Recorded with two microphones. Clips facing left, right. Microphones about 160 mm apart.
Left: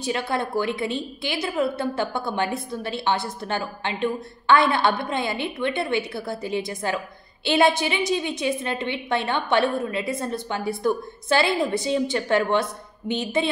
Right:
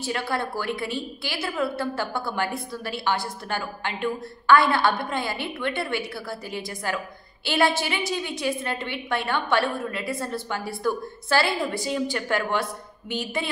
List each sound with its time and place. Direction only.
0.0 s a woman's voice: 20° left (ahead or behind)